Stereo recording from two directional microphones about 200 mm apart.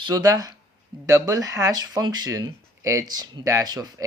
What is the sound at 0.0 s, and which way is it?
Speech, 20° right (ahead or behind).